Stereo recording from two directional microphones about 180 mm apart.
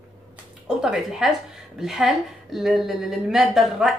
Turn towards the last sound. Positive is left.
turn(degrees=0)  # may be behind; listen again after turning